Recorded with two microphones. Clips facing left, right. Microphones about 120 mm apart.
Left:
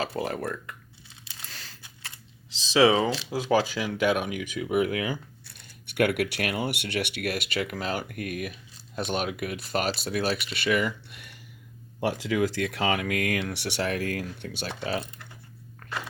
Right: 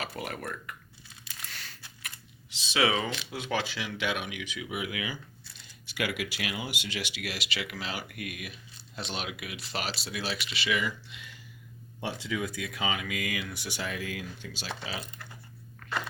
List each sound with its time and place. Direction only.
0.0 s speech: 30° left (ahead or behind)
1.2 s a sound: 30° left (ahead or behind)
2.0 s speech: 30° left (ahead or behind); by 11.3 s 55° left (ahead or behind)
12.2 s speech: 90° left; by 15.0 s 55° left (ahead or behind)